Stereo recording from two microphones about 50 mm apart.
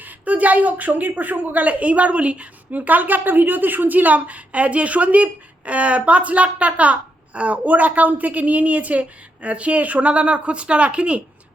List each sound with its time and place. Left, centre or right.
0.0 s a woman's voice: right
2.7 s a woman's voice: right